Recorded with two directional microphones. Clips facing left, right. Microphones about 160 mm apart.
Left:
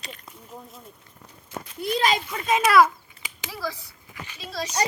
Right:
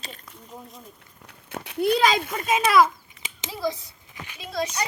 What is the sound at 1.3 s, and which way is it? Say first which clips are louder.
Speech: right 1 dB; 70° right (ahead or behind).